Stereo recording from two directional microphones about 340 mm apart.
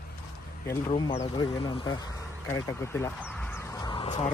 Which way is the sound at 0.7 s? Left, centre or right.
Centre.